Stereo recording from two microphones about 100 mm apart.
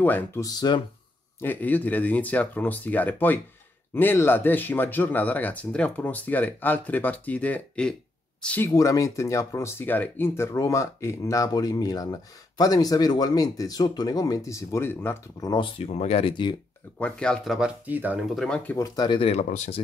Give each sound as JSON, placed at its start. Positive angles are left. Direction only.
{"t": 0.0, "sound": "speech", "side_deg": 15}
{"t": 0.4, "sound": "speech", "side_deg": 45}
{"t": 1.4, "sound": "speech", "side_deg": 20}
{"t": 8.6, "sound": "speech", "side_deg": 35}
{"t": 15.4, "sound": "speech", "side_deg": 50}
{"t": 15.8, "sound": "speech", "side_deg": 75}
{"t": 17.0, "sound": "speech", "side_deg": 10}
{"t": 17.6, "sound": "speech", "side_deg": -10}
{"t": 18.3, "sound": "speech", "side_deg": 5}
{"t": 18.8, "sound": "speech", "side_deg": 40}
{"t": 19.1, "sound": "speech", "side_deg": 80}